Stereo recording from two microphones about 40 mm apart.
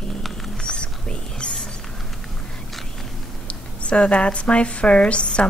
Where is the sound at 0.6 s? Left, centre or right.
Left.